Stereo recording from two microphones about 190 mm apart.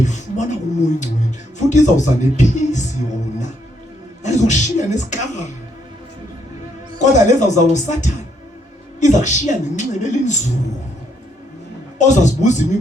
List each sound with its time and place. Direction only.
0.0 s speech: 40° left (ahead or behind)
1.5 s a woman's voice: 40° left (ahead or behind)
4.2 s a woman's voice: 40° left (ahead or behind)
7.0 s a woman's voice: 40° left (ahead or behind)
11.9 s a woman's voice: 40° left (ahead or behind)